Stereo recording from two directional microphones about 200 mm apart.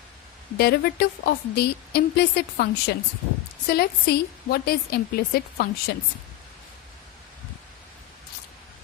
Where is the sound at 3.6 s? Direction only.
50° left (ahead or behind).